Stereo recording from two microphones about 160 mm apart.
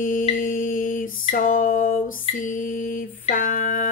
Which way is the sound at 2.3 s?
55° left (ahead or behind).